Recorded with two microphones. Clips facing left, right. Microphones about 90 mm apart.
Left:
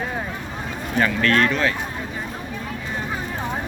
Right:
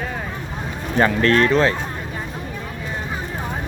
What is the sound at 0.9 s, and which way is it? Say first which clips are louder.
Speech: right 3 dB; 30° right (ahead or behind).